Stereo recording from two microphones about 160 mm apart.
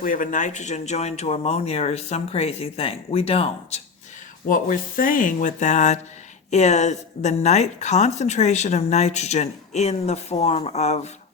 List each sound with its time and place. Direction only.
0.0 s speech: 60° left (ahead or behind); by 3.8 s 40° left (ahead or behind)
4.4 s a woman's voice: 60° left (ahead or behind)